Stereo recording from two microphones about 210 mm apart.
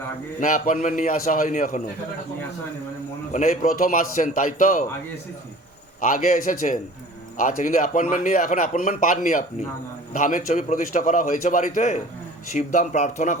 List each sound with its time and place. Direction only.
0.3 s a man's voice: 40° left (ahead or behind)
3.3 s a man's voice: 40° left (ahead or behind)
6.0 s a man's voice: 40° left (ahead or behind)